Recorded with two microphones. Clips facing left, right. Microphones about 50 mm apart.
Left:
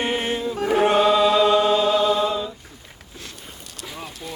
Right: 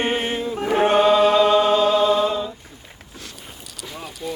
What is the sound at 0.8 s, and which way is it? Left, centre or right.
Chant, right.